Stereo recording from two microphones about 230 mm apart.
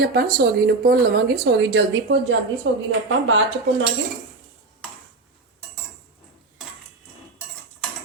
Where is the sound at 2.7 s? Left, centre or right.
Right.